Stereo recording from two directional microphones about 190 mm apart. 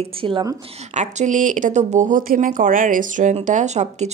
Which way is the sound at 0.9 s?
40° right (ahead or behind).